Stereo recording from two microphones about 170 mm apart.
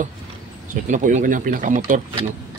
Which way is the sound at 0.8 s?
45° right (ahead or behind).